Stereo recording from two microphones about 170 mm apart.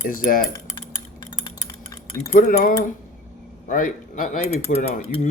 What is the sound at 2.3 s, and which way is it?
Speech, 60° left (ahead or behind).